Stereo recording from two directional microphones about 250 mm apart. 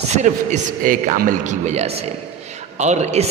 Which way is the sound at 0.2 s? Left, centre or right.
Right.